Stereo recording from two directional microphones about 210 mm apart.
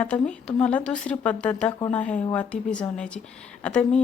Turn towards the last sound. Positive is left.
turn(degrees=5)  # may be behind; listen again after turning